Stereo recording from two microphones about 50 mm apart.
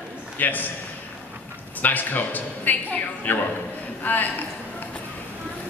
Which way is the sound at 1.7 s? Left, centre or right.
Left.